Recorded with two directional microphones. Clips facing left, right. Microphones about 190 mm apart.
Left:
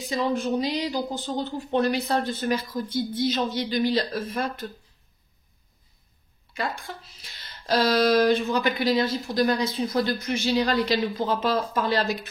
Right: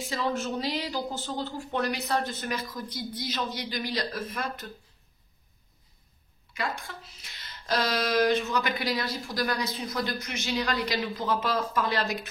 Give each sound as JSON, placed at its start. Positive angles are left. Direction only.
{"t": 0.0, "sound": "speech", "side_deg": 15}
{"t": 6.5, "sound": "a woman's voice", "side_deg": 30}